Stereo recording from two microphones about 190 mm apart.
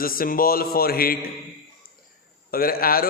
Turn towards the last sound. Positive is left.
turn(degrees=50)  # may be behind; listen again after turning